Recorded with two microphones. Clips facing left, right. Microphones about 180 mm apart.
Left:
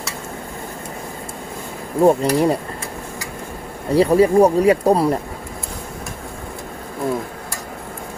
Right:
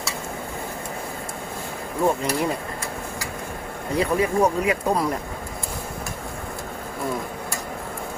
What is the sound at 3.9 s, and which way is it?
Speech, 35° left (ahead or behind).